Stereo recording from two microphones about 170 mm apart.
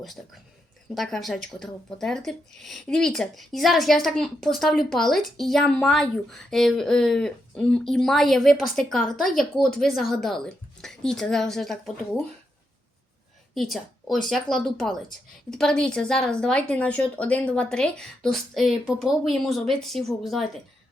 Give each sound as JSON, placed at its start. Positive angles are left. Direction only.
{"t": 0.9, "sound": "speech", "side_deg": 0}
{"t": 13.5, "sound": "speech", "side_deg": 0}